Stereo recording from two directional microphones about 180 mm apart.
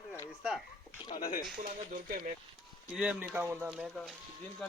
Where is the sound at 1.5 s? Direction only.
50° right (ahead or behind).